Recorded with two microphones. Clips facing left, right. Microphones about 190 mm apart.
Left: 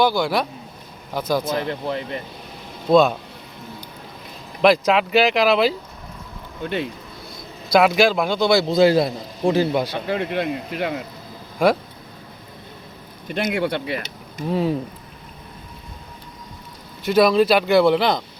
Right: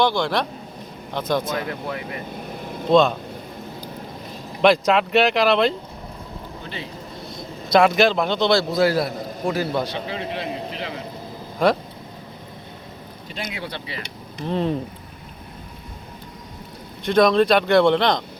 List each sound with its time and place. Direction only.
0.0 s speech: 5° left (ahead or behind)
1.5 s a man's voice: 30° left (ahead or behind)
2.9 s speech: 5° left (ahead or behind)
4.6 s speech: centre (ahead or behind)
7.7 s speech: 5° left (ahead or behind)
8.6 s a man's voice: 20° left (ahead or behind)
10.1 s speech: 55° left (ahead or behind)
11.6 s speech: 10° left (ahead or behind)
13.2 s speech: 65° left (ahead or behind)
14.3 s speech: 5° left (ahead or behind)
17.0 s speech: 5° left (ahead or behind)